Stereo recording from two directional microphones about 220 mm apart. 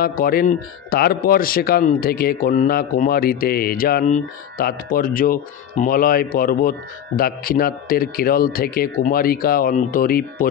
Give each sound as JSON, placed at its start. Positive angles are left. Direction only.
{"t": 0.0, "sound": "speech", "side_deg": 40}